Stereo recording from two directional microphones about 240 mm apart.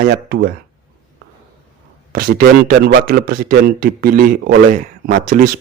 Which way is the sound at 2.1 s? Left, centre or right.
Right.